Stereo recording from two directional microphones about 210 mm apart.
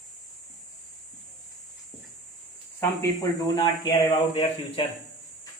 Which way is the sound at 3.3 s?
20° left (ahead or behind).